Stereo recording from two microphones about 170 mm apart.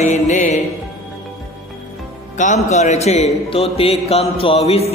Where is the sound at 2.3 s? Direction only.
45° left (ahead or behind).